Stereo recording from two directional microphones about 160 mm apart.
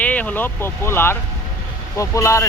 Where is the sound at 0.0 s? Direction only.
10° left (ahead or behind).